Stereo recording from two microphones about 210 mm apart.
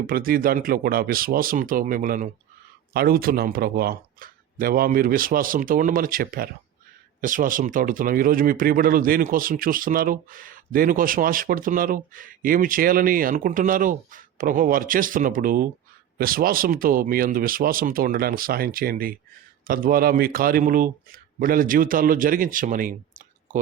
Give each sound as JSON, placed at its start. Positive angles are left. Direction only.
{"t": 0.1, "sound": "speech", "side_deg": -45}